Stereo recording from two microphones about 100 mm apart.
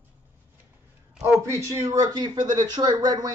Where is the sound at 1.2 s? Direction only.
30° right (ahead or behind).